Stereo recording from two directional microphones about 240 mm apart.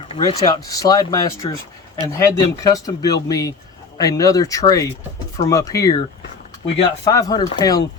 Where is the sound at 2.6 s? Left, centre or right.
Centre.